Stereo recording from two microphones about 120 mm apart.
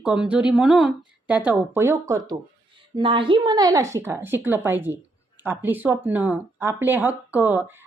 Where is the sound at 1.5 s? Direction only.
20° right (ahead or behind).